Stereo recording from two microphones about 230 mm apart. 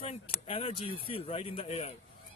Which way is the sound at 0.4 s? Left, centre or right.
Left.